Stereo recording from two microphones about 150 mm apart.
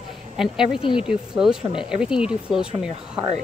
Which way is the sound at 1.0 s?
5° right (ahead or behind).